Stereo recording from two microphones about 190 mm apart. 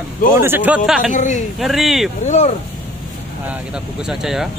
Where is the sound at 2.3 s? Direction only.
35° left (ahead or behind).